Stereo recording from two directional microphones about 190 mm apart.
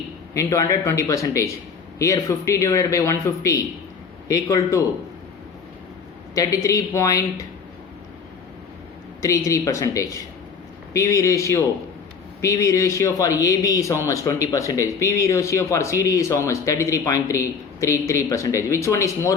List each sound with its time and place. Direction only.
0.3 s a man's voice: 15° left (ahead or behind)
6.3 s a man's voice: 15° left (ahead or behind)
9.2 s a man's voice: 15° left (ahead or behind)